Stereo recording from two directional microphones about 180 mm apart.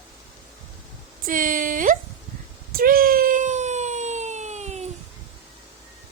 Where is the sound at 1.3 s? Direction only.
50° right (ahead or behind).